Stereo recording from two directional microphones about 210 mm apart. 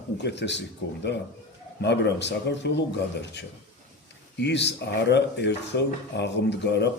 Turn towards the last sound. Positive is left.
turn(degrees=55)  # may be behind; listen again after turning